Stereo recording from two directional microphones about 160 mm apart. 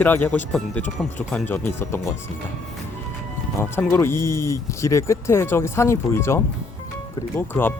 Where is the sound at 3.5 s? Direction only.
15° left (ahead or behind).